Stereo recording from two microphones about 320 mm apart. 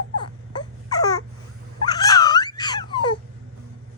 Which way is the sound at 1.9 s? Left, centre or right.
Centre.